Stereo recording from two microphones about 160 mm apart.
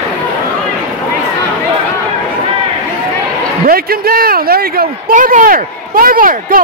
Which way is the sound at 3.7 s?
70° right (ahead or behind).